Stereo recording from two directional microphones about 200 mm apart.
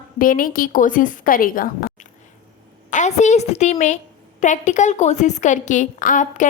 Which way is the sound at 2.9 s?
35° left (ahead or behind).